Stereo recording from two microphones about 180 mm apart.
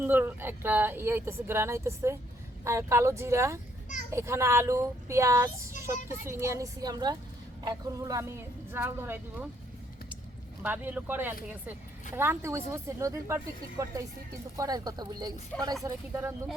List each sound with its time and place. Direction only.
0.0 s speech: 10° right (ahead or behind)
10.6 s speech: 10° right (ahead or behind)